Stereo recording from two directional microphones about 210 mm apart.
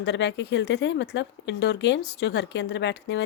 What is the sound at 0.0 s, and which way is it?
Speech, 55° left (ahead or behind).